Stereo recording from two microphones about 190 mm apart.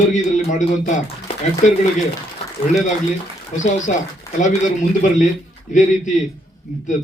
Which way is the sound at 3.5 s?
40° left (ahead or behind).